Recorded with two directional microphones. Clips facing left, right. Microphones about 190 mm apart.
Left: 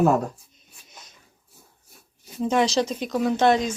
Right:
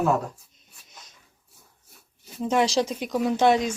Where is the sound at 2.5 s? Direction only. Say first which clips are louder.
Left 1 dB; 10° right (ahead or behind).